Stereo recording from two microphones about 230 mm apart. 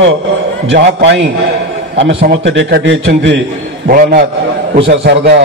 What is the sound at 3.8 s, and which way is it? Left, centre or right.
A man's voice, right.